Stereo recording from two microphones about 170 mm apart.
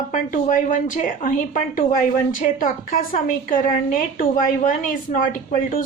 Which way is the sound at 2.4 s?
50° left (ahead or behind).